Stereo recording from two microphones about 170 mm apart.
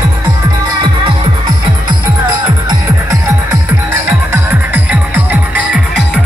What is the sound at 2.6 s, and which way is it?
Music, 20° right (ahead or behind).